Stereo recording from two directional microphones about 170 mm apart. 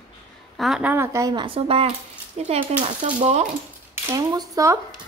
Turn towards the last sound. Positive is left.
turn(degrees=-20)  # may be behind; listen again after turning